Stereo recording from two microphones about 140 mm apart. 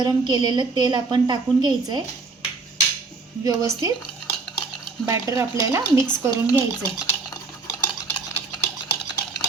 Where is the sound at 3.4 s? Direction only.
25° right (ahead or behind).